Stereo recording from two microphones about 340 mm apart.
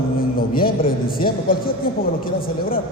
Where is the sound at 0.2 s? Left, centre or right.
Left.